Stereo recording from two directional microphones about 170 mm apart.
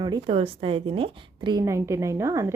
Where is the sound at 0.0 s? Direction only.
30° right (ahead or behind).